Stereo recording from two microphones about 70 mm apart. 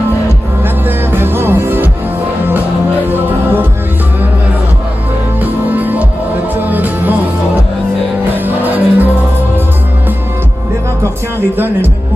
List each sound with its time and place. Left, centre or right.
0.8 s music: right
5.4 s music: right
8.5 s music: right
11.5 s music: right